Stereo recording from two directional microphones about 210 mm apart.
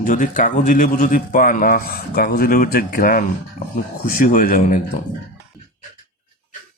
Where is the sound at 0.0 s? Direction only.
40° left (ahead or behind).